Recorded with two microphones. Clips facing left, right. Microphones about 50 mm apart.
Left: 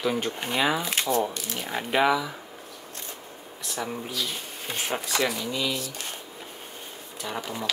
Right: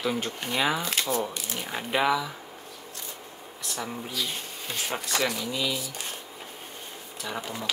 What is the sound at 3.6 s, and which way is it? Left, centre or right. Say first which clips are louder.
Speech: left 2 dB; centre.